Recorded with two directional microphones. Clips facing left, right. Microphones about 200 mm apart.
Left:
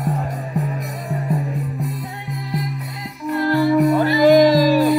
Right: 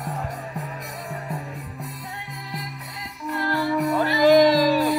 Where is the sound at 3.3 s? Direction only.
15° left (ahead or behind).